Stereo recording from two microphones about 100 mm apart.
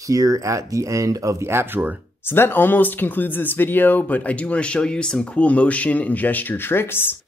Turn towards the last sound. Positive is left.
turn(degrees=20)  # may be behind; listen again after turning